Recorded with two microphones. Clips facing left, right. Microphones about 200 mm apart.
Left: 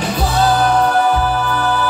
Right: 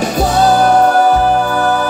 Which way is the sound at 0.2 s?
45° right (ahead or behind).